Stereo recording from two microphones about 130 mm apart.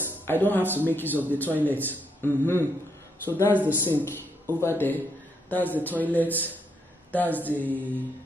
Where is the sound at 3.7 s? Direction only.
15° left (ahead or behind).